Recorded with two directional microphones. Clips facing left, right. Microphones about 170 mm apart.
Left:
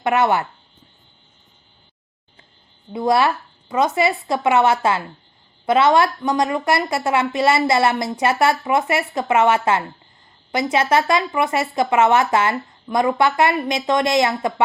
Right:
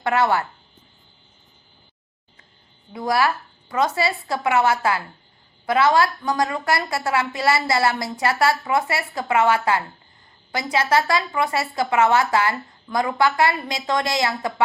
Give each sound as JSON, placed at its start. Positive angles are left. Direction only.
{"t": 0.0, "sound": "a woman's voice", "side_deg": 20}
{"t": 2.9, "sound": "a woman's voice", "side_deg": 25}